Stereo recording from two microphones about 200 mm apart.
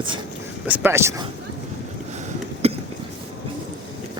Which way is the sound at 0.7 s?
10° right (ahead or behind).